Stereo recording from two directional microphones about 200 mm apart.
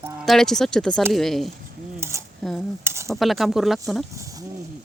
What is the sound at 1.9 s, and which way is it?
Cutlery, 15° right (ahead or behind).